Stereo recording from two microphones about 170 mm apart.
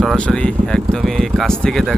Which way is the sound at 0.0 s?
Centre (ahead or behind).